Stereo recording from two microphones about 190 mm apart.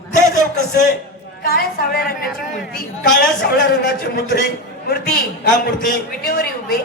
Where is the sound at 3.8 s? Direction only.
55° left (ahead or behind).